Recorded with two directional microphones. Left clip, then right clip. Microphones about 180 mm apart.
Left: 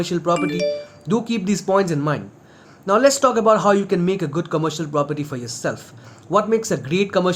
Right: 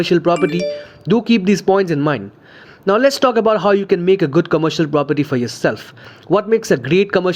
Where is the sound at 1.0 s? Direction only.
40° right (ahead or behind).